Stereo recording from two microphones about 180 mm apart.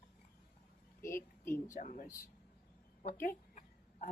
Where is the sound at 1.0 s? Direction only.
15° left (ahead or behind).